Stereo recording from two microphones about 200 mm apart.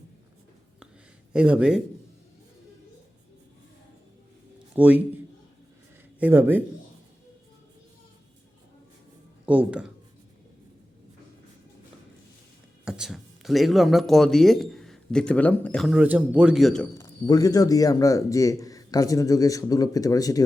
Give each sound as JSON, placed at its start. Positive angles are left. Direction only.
{"t": 1.3, "sound": "speech", "side_deg": -5}
{"t": 4.7, "sound": "a man's voice", "side_deg": -10}
{"t": 9.5, "sound": "speech", "side_deg": -5}
{"t": 12.8, "sound": "a man's voice", "side_deg": -5}
{"t": 16.9, "sound": "speech", "side_deg": 15}